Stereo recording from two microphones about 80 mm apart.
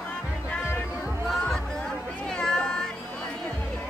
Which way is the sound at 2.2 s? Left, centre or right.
Centre.